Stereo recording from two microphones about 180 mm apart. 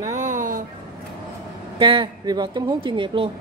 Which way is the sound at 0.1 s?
45° right (ahead or behind).